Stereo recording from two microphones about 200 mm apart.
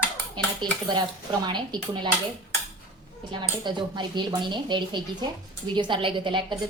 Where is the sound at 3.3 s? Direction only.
25° right (ahead or behind).